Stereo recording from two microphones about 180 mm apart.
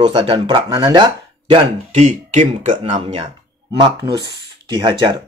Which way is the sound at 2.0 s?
40° right (ahead or behind).